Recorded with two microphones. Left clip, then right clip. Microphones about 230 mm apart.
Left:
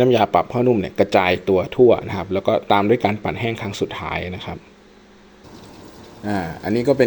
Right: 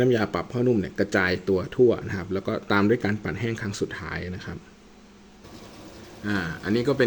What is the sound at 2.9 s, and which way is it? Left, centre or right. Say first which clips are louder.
Speech: left 7 dB; left.